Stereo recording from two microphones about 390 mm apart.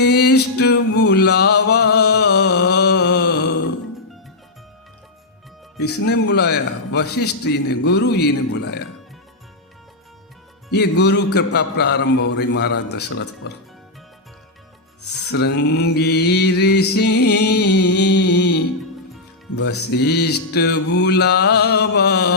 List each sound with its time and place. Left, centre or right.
0.0 s a man's voice: left
1.0 s a sound: left
5.8 s a man's voice: left
10.7 s a man's voice: left
15.3 s mantra: left
19.5 s a man's voice: left